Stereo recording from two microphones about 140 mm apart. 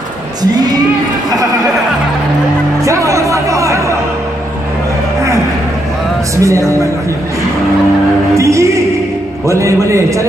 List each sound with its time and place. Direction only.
0.4 s a sound: 30° right (ahead or behind)
2.8 s music: 20° right (ahead or behind)
6.3 s speech: 20° right (ahead or behind)
8.4 s music: 20° right (ahead or behind)
9.5 s a man's voice: 20° right (ahead or behind)